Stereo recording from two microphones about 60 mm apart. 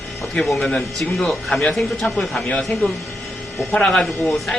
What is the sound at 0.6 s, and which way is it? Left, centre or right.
Speech, centre.